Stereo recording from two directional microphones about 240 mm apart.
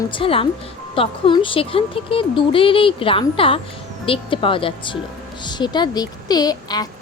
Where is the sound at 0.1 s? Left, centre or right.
Left.